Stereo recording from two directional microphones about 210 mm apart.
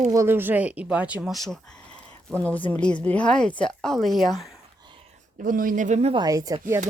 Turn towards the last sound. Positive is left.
turn(degrees=-15)  # may be behind; listen again after turning